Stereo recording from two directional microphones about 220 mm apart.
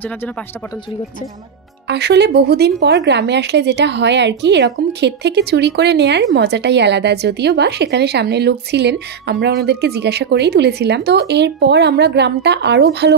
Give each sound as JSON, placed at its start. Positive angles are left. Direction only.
{"t": 1.9, "sound": "a woman's voice", "side_deg": -50}